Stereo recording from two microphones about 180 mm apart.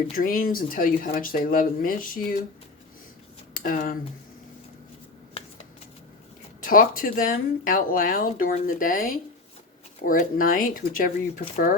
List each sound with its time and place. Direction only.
0.2 s speech: 50° left (ahead or behind)
3.5 s speech: 50° left (ahead or behind)
6.6 s speech: 50° left (ahead or behind)